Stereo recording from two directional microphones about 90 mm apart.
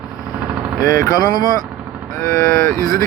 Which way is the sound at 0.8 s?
45° left (ahead or behind).